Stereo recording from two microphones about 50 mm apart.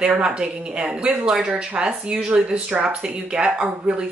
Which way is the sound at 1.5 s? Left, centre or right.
Right.